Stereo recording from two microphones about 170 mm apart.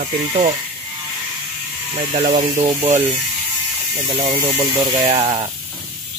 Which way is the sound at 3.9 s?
30° right (ahead or behind).